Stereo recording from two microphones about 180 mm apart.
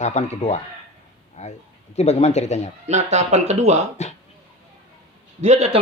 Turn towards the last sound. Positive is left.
turn(degrees=-35)  # may be behind; listen again after turning